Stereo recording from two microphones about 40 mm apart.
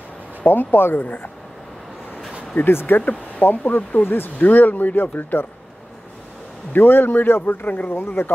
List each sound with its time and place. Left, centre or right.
0.5 s a man's voice: left
1.0 s speech: left
2.6 s speech: left
3.0 s speech: left
3.4 s a man's voice: left
4.5 s speech: left
6.7 s a man's voice: left
7.6 s speech: left
8.2 s speech: left